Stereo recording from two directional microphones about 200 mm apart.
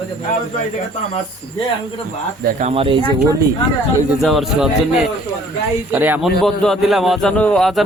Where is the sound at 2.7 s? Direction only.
25° right (ahead or behind).